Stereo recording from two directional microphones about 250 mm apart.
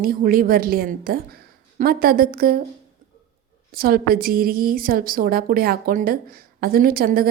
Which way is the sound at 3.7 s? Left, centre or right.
Right.